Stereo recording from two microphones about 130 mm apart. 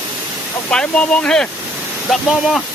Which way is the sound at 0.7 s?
5° left (ahead or behind).